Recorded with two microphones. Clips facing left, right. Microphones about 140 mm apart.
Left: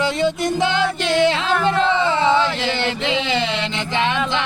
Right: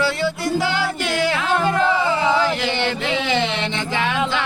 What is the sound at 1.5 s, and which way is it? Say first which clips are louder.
Chant: left 1 dB; 20° right (ahead or behind).